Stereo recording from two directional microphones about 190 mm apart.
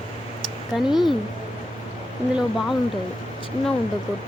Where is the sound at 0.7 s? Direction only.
5° right (ahead or behind).